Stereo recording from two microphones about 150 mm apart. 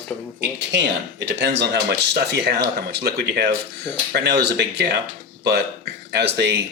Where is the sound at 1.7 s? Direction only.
90° right.